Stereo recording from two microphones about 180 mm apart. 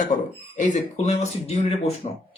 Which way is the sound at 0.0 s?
45° left (ahead or behind).